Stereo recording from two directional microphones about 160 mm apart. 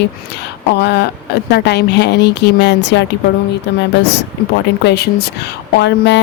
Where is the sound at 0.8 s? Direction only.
90° left.